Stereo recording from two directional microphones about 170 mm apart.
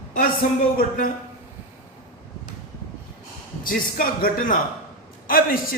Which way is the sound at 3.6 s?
55° left (ahead or behind).